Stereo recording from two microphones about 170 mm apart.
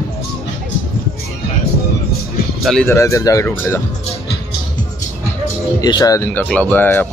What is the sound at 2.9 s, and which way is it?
Speech, 15° left (ahead or behind).